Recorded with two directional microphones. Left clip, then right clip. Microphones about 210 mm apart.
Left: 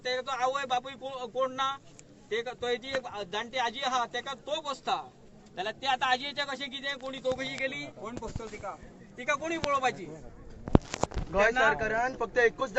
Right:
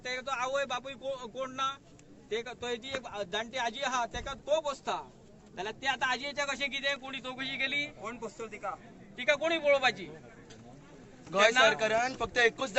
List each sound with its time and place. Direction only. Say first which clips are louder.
0.0 s a man's voice: left 4 dB; centre (ahead or behind)
8.2 s speech: right 1 dB; 20° left (ahead or behind)
9.1 s a man's voice: right 3 dB; centre (ahead or behind)
11.3 s speech: right 1 dB; 25° right (ahead or behind)